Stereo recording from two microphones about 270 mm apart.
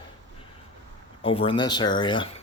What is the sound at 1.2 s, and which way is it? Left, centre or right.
Speech, left.